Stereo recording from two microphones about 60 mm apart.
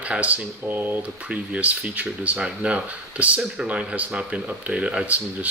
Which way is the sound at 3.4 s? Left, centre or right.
Centre.